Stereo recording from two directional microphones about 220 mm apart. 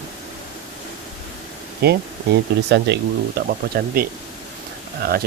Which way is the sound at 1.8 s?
45° right (ahead or behind).